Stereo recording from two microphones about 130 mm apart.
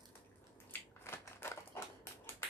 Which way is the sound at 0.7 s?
15° left (ahead or behind).